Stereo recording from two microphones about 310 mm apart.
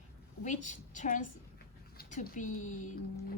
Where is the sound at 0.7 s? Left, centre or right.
Left.